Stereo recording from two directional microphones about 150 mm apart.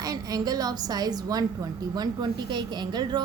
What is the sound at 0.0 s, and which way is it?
A woman's voice, 25° right (ahead or behind).